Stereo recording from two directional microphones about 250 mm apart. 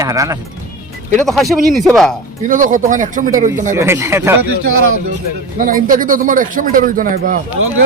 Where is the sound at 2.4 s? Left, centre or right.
Right.